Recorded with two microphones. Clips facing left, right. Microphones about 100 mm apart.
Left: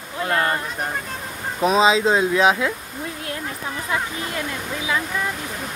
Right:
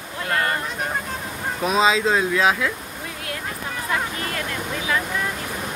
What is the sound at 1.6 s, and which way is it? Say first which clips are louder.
Speech: left 3 dB; 25° left (ahead or behind).